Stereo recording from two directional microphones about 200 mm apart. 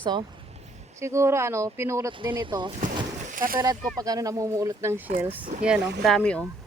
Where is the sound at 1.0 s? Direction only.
15° right (ahead or behind).